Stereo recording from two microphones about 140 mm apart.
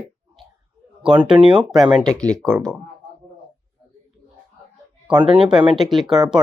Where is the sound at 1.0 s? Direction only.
5° right (ahead or behind).